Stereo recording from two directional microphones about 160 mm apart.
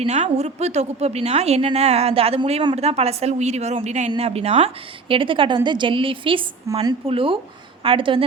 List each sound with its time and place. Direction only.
0.0 s a woman's voice: 45° right (ahead or behind)